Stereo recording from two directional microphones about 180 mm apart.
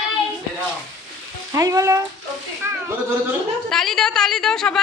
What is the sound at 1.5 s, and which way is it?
Speech, 15° right (ahead or behind).